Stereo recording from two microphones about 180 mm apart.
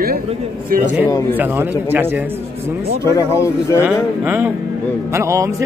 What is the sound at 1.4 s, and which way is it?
Speech, 10° right (ahead or behind).